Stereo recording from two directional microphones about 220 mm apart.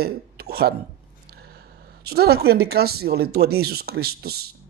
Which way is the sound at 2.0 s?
45° right (ahead or behind).